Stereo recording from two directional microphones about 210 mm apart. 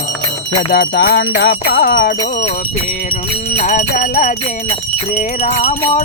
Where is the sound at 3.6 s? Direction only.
35° left (ahead or behind).